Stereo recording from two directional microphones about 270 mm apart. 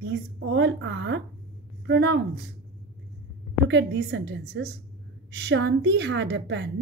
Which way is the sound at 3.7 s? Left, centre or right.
Right.